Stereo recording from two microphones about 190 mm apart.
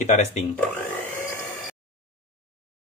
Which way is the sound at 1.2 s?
10° left (ahead or behind).